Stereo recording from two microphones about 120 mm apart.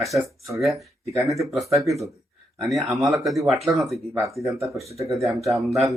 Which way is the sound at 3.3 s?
Centre (ahead or behind).